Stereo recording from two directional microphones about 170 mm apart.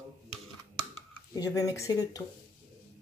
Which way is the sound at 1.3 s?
20° left (ahead or behind).